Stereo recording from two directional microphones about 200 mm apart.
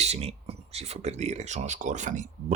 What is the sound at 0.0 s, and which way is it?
Speech, 30° right (ahead or behind).